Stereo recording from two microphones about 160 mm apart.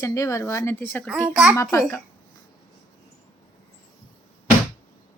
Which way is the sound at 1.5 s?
20° left (ahead or behind).